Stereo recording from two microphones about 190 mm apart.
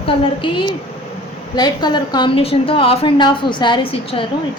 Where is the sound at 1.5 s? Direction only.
20° left (ahead or behind).